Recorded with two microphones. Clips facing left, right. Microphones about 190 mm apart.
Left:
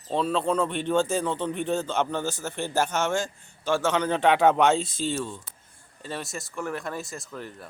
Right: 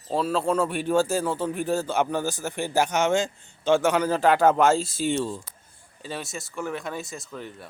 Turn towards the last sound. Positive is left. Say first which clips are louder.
# right 1 dB
turn(degrees=0)  # may be behind; listen again after turning